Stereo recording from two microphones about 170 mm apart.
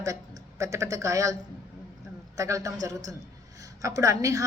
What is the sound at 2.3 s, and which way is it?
A woman's voice, 20° right (ahead or behind).